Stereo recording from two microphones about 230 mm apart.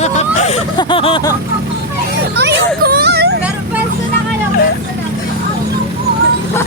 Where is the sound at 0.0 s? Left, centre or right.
Left.